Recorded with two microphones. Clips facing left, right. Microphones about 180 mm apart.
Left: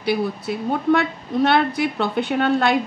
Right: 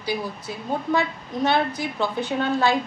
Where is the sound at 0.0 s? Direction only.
65° left (ahead or behind).